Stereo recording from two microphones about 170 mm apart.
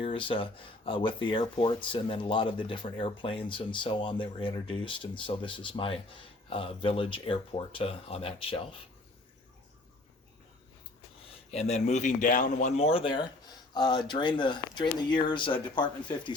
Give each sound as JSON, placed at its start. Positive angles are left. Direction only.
{"t": 0.0, "sound": "speech", "side_deg": 30}
{"t": 11.3, "sound": "speech", "side_deg": 40}